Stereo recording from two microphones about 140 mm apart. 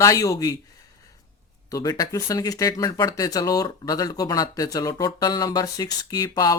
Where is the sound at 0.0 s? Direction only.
25° left (ahead or behind).